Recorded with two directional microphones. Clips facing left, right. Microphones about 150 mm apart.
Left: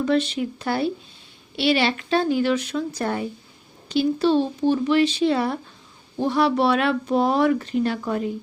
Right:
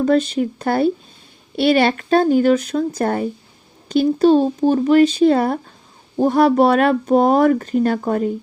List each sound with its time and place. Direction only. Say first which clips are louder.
0.0 s speech: right 5 dB; 45° right (ahead or behind)